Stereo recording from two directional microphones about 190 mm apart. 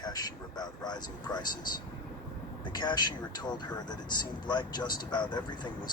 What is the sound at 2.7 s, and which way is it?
Speech, 20° left (ahead or behind).